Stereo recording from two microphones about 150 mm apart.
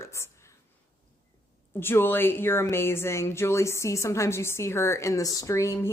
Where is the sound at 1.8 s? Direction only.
15° left (ahead or behind).